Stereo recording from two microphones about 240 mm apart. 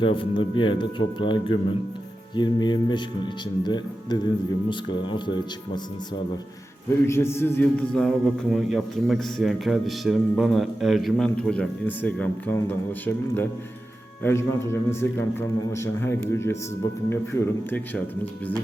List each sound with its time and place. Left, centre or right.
0.0 s a man's voice: left
4.7 s speech: centre
7.1 s a man's voice: centre